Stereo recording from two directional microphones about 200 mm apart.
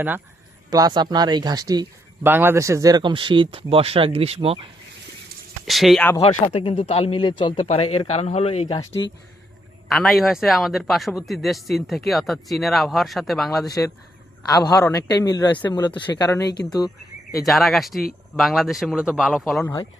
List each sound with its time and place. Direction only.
0.7 s speech: 20° right (ahead or behind)
5.6 s speech: centre (ahead or behind)
6.5 s speech: 25° left (ahead or behind)
9.9 s speech: centre (ahead or behind)
13.7 s speech: 15° left (ahead or behind)
17.4 s speech: centre (ahead or behind)